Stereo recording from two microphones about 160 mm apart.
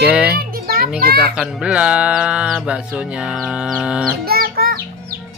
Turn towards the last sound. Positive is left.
turn(degrees=-70)  # may be behind; listen again after turning